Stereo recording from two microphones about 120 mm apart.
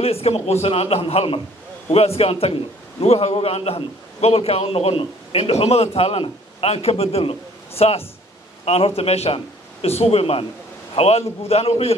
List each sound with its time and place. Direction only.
0.0 s a man's voice: 55° left (ahead or behind)